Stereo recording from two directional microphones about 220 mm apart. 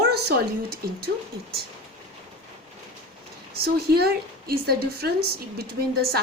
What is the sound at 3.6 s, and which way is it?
Speech, 45° right (ahead or behind).